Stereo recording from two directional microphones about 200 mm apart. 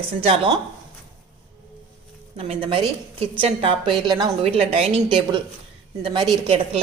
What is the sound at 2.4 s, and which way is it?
A woman's voice, 30° right (ahead or behind).